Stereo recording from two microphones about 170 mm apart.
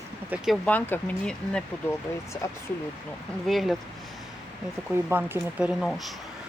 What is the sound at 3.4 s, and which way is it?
Speech, centre (ahead or behind).